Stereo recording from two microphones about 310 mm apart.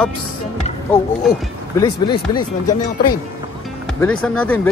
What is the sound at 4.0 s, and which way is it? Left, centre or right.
Speech, centre.